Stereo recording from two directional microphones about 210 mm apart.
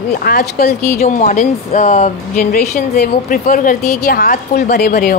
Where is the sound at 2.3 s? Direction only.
50° left (ahead or behind).